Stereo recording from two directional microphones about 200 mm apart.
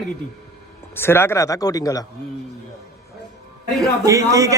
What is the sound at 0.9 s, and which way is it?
Speech, 10° left (ahead or behind).